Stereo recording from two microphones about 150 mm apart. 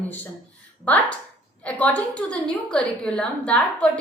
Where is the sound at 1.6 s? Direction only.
10° left (ahead or behind).